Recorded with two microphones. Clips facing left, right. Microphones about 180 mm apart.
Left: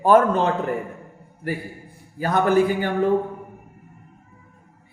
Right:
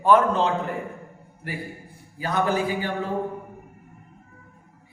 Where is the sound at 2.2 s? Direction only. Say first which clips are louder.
Left 6 dB; 55° left (ahead or behind).